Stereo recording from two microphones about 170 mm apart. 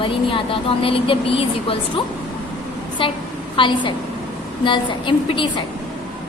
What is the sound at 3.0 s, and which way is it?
A woman's voice, 30° left (ahead or behind).